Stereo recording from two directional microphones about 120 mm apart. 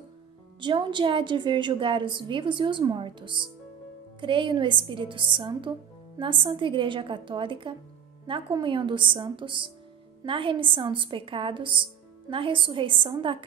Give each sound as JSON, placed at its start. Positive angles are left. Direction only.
{"t": 0.6, "sound": "a woman's voice", "side_deg": -40}